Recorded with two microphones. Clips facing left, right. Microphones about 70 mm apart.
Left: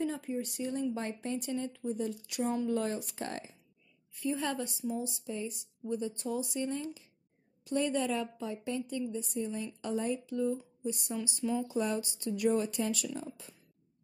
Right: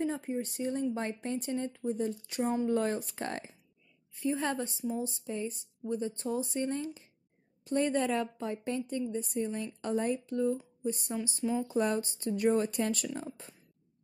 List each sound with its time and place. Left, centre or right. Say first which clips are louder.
0.0 s a woman's voice: right 1 dB; right
4.1 s a woman's voice: right 2 dB; right